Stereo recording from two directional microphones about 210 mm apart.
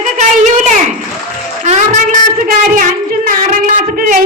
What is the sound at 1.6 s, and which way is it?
Child singing, 35° right (ahead or behind).